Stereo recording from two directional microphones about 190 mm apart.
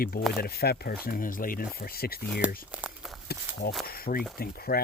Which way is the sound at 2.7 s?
5° right (ahead or behind).